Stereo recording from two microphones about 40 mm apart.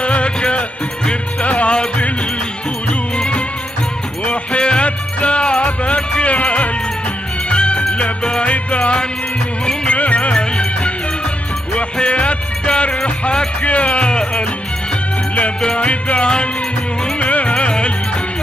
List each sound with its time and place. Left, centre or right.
0.0 s music: left
3.2 s music: left
10.3 s music: left
15.8 s music: left